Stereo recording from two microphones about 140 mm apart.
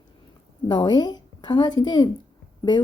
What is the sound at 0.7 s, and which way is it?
A woman's voice, 30° left (ahead or behind).